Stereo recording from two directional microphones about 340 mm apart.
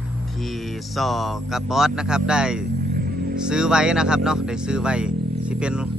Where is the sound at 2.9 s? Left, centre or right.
Right.